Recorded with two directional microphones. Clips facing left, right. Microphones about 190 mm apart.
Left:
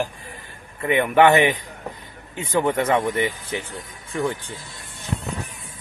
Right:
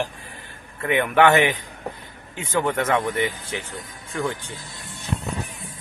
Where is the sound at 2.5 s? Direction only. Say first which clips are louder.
Left 2 dB; 10° left (ahead or behind).